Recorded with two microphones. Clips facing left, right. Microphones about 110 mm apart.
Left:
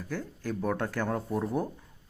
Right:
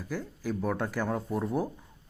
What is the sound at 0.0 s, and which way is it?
Speech, 5° right (ahead or behind).